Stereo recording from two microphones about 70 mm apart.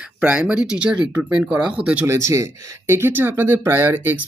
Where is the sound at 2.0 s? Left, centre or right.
Right.